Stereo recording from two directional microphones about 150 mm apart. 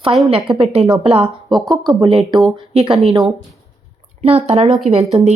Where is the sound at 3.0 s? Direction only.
30° right (ahead or behind).